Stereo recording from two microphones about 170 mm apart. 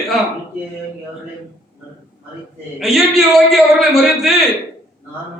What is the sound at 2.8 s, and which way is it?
A man's voice, centre (ahead or behind).